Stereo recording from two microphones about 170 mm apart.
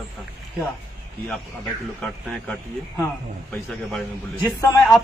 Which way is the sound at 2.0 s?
5° left (ahead or behind).